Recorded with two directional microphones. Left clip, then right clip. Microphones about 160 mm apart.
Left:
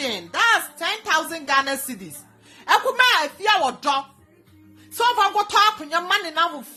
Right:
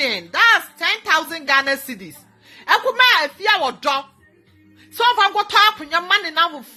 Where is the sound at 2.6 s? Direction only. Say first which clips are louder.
Right 3 dB; centre (ahead or behind).